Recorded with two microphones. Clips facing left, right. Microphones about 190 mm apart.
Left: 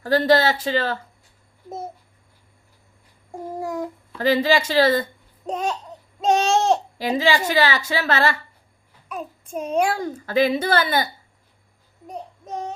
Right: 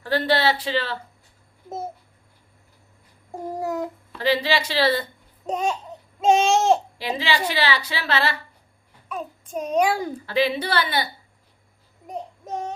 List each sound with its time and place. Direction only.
0.0 s a woman's voice: 40° left (ahead or behind)
3.6 s a child's voice: 5° right (ahead or behind)
4.2 s a woman's voice: 45° left (ahead or behind)
5.5 s babbling: centre (ahead or behind)
7.0 s a woman's voice: 45° left (ahead or behind)
9.0 s a child's voice: 5° left (ahead or behind)
10.2 s a woman's voice: 45° left (ahead or behind)